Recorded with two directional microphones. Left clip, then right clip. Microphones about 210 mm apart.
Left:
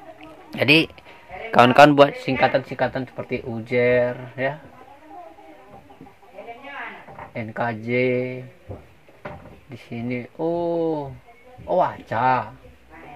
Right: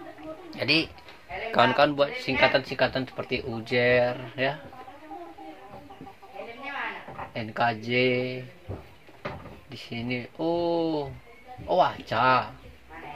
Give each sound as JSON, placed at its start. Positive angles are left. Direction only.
{"t": 0.5, "sound": "a man's voice", "side_deg": 45}
{"t": 2.4, "sound": "speech", "side_deg": 25}
{"t": 7.3, "sound": "speech", "side_deg": 20}
{"t": 9.9, "sound": "speech", "side_deg": 20}